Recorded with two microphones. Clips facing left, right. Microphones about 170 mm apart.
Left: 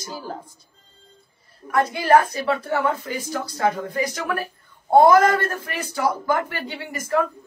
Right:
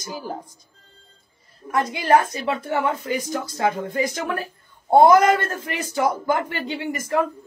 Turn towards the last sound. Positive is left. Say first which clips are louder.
# right 4 dB
turn(degrees=-20)  # may be behind; listen again after turning